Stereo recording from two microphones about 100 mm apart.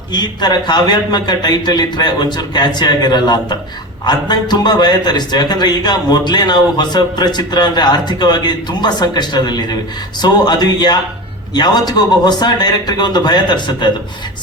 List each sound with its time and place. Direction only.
0.1 s a man's voice: 45° left (ahead or behind)